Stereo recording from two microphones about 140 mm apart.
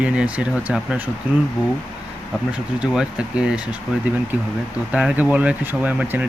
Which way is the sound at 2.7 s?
5° right (ahead or behind).